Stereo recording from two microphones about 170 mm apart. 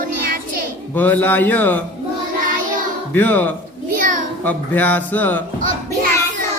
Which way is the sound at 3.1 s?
10° left (ahead or behind).